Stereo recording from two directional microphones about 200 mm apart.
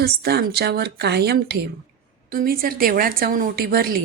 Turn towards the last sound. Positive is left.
turn(degrees=-50)  # may be behind; listen again after turning